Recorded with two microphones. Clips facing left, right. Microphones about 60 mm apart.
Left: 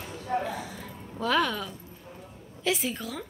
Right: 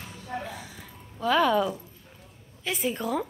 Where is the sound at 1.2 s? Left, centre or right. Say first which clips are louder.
Right 4 dB; centre.